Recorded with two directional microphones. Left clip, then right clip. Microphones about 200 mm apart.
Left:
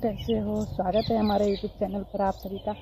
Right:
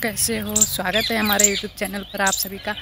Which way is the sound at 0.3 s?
35° right (ahead or behind).